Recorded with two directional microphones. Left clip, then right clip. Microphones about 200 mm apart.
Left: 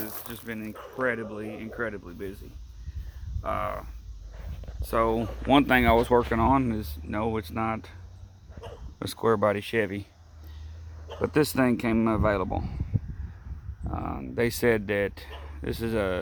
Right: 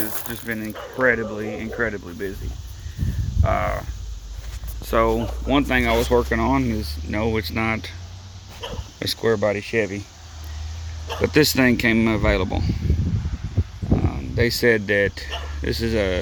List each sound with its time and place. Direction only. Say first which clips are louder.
0.0 s speech: right 8 dB; 10° left (ahead or behind)
3.4 s speech: right 7 dB; 15° left (ahead or behind)
4.9 s speech: right 6 dB; 20° left (ahead or behind)
5.1 s speech: right 1 dB; 50° left (ahead or behind)
6.1 s speech: right 3 dB; 25° left (ahead or behind); by 7.9 s 10° left (ahead or behind)
9.0 s speech: right 4 dB; 25° left (ahead or behind)
11.1 s speech: right 7 dB; 10° left (ahead or behind)
13.9 s speech: right 6 dB; 25° left (ahead or behind)